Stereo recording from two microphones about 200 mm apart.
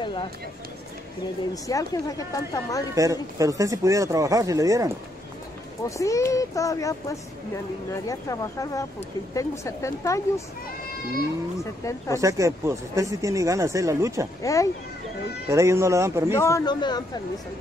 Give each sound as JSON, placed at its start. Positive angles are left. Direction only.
{"t": 0.0, "sound": "a sound", "side_deg": 25}
{"t": 1.5, "sound": "a woman's voice", "side_deg": 15}
{"t": 2.9, "sound": "speech", "side_deg": -15}
{"t": 5.9, "sound": "a woman's voice", "side_deg": 15}
{"t": 12.2, "sound": "speech", "side_deg": -15}
{"t": 14.4, "sound": "a woman's voice", "side_deg": 15}
{"t": 15.4, "sound": "speech", "side_deg": -15}
{"t": 16.3, "sound": "speech", "side_deg": 15}